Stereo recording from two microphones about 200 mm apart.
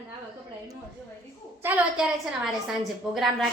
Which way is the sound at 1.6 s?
5° right (ahead or behind).